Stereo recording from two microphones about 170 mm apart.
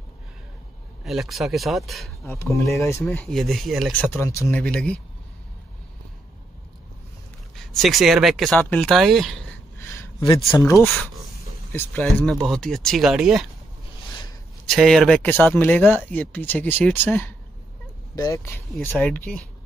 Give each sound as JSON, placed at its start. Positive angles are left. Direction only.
{"t": 1.0, "sound": "speech", "side_deg": 0}
{"t": 2.5, "sound": "speech", "side_deg": 15}
{"t": 7.5, "sound": "speech", "side_deg": 0}
{"t": 8.5, "sound": "speech", "side_deg": 10}
{"t": 8.8, "sound": "speech", "side_deg": 0}
{"t": 9.8, "sound": "a sound", "side_deg": 15}
{"t": 10.2, "sound": "speech", "side_deg": 30}
{"t": 10.6, "sound": "speech", "side_deg": 15}
{"t": 12.3, "sound": "speech", "side_deg": 0}
{"t": 14.7, "sound": "speech", "side_deg": 0}